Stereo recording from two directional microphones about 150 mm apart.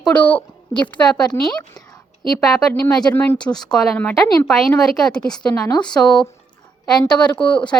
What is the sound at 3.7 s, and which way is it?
A woman's voice, 5° left (ahead or behind).